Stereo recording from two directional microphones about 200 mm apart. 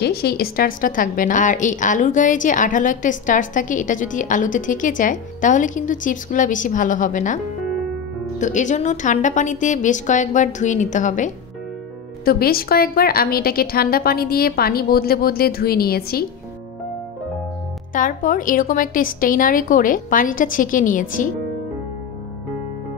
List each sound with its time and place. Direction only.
0.0 s a woman's voice: 55° left (ahead or behind)
8.4 s a woman's voice: 40° left (ahead or behind)
12.3 s a woman's voice: 50° left (ahead or behind)
17.9 s a woman's voice: 40° left (ahead or behind)